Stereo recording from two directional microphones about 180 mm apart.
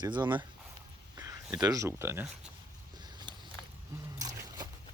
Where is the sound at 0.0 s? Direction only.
25° right (ahead or behind).